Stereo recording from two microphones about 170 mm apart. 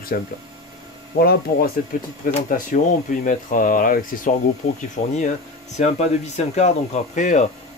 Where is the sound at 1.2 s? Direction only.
65° left (ahead or behind).